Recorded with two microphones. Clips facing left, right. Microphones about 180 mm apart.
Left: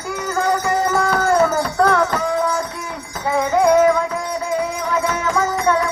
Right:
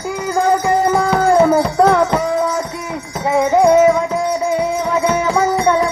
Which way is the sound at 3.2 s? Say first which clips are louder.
Right 4 dB; 25° right (ahead or behind).